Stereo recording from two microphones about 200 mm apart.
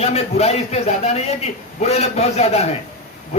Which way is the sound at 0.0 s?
30° left (ahead or behind).